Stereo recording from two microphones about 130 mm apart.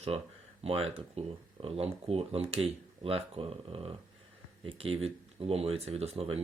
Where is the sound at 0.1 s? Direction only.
50° right (ahead or behind).